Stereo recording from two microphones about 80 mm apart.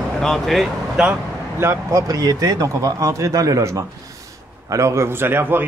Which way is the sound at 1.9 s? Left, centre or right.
Right.